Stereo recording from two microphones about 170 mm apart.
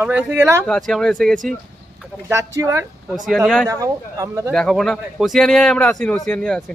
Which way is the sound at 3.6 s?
20° right (ahead or behind).